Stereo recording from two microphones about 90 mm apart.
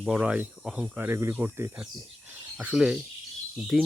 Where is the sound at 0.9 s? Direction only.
25° right (ahead or behind).